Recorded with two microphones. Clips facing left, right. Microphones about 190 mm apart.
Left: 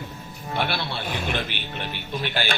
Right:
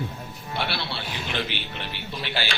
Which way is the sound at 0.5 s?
50° left (ahead or behind).